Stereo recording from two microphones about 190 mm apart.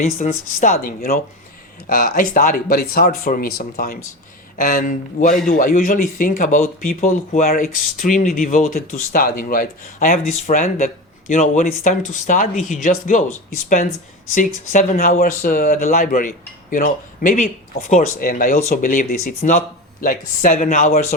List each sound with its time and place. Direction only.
0.0 s speech: 45° left (ahead or behind)
14.3 s speech: 40° left (ahead or behind)